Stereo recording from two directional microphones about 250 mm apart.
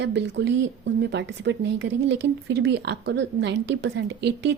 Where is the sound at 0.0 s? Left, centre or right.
Right.